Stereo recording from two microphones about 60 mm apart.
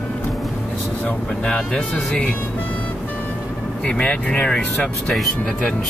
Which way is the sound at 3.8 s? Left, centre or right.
Centre.